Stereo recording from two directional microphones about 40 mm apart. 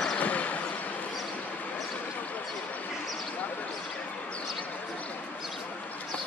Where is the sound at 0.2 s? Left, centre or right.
Left.